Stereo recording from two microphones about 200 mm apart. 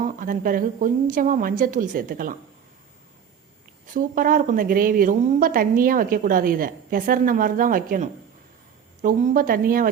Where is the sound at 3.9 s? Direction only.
45° right (ahead or behind).